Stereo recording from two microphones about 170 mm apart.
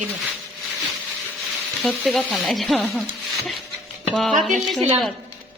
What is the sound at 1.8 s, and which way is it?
Speech, centre (ahead or behind).